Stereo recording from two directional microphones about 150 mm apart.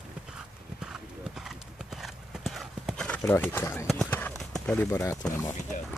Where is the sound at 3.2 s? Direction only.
15° left (ahead or behind).